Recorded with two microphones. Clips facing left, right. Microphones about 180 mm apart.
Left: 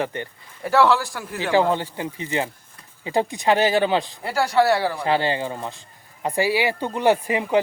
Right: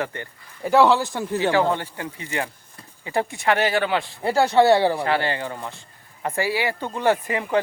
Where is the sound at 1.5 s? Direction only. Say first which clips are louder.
Left 2 dB; 20° left (ahead or behind).